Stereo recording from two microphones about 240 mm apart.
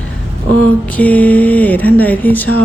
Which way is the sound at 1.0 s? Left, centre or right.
Centre.